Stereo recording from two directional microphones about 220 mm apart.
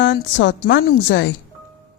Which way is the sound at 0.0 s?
55° left (ahead or behind).